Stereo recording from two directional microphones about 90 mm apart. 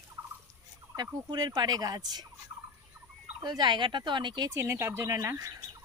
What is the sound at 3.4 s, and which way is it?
Speech, 50° right (ahead or behind).